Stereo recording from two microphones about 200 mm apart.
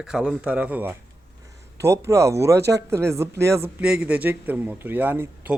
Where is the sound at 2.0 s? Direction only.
15° right (ahead or behind).